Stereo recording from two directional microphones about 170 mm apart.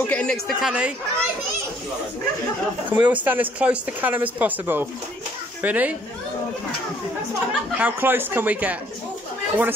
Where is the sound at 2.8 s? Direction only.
10° right (ahead or behind).